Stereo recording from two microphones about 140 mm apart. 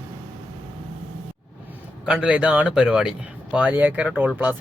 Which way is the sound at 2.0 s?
5° right (ahead or behind).